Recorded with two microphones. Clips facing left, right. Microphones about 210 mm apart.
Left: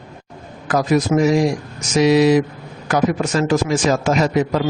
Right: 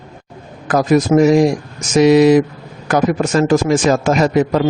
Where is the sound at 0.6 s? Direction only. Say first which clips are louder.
Right 4 dB; 50° right (ahead or behind).